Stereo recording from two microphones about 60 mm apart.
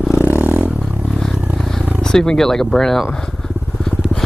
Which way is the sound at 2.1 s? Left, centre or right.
Centre.